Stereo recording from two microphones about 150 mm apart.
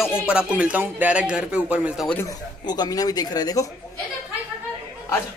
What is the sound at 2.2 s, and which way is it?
Speech, 30° left (ahead or behind).